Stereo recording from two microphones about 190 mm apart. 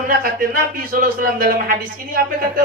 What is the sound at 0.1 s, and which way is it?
A man's voice, 50° right (ahead or behind).